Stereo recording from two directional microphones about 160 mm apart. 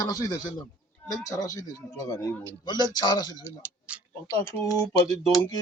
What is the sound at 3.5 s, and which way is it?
Speech, 10° right (ahead or behind).